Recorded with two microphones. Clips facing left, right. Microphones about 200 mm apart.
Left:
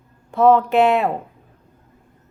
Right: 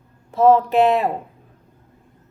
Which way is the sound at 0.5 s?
35° right (ahead or behind).